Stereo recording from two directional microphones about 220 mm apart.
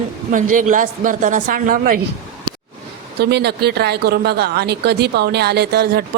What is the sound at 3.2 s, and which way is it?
A woman's voice, 50° right (ahead or behind).